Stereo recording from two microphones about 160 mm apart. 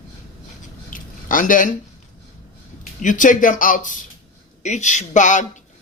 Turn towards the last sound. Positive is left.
turn(degrees=50)  # may be behind; listen again after turning